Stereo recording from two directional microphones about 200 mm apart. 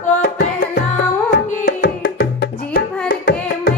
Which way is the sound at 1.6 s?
50° left (ahead or behind).